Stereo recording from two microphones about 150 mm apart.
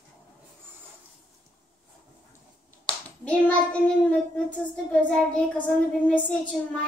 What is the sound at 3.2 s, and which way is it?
Child singing, 10° left (ahead or behind).